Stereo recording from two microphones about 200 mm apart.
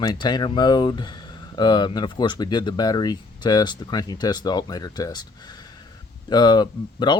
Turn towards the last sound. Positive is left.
turn(degrees=20)  # may be behind; listen again after turning